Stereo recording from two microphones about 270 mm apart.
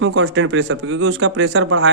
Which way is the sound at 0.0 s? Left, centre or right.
Right.